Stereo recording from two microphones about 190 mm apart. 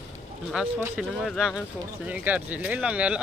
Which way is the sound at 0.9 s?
Centre (ahead or behind).